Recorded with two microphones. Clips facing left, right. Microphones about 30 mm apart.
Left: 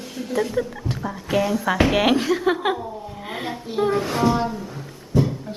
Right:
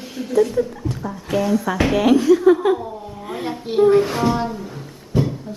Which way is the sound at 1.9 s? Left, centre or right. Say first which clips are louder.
Right 5 dB; left.